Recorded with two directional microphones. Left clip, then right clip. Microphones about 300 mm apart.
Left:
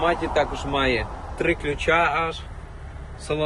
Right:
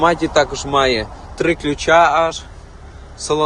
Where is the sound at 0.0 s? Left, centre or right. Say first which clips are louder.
Right 7 dB; right.